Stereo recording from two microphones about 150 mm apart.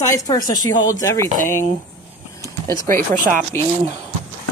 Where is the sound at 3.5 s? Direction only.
15° left (ahead or behind).